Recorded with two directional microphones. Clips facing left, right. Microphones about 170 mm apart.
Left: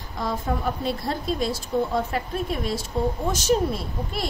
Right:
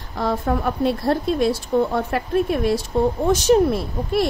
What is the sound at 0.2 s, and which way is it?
A woman's voice, 60° right (ahead or behind).